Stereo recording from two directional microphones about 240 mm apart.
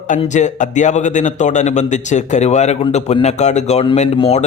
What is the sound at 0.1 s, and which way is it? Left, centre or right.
A man's voice, left.